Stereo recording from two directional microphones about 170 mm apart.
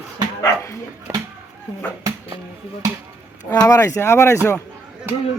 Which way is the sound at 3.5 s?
15° left (ahead or behind).